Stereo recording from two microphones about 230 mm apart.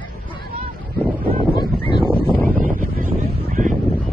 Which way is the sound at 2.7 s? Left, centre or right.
Right.